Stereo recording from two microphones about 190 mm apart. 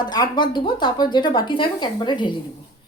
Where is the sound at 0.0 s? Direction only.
20° left (ahead or behind).